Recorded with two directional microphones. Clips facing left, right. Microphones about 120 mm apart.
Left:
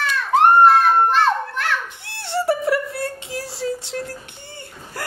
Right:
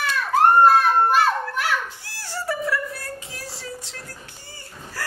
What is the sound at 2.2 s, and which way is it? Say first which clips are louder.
Music: left 7 dB; 25° left (ahead or behind).